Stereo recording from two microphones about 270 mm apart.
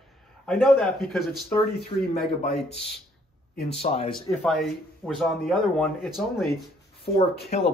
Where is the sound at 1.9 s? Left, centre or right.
Centre.